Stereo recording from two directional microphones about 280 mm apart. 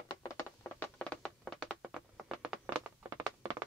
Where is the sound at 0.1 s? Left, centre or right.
Centre.